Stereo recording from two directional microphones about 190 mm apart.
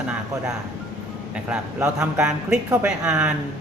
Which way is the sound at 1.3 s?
5° right (ahead or behind).